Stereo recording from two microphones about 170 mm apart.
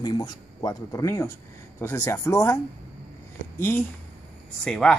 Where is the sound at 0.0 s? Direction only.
25° left (ahead or behind).